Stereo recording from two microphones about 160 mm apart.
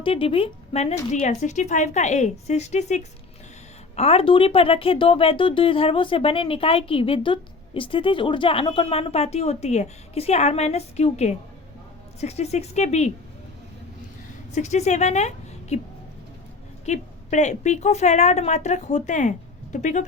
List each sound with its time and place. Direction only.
0.0 s a woman's voice: 35° left (ahead or behind)
14.5 s a woman's voice: 45° left (ahead or behind)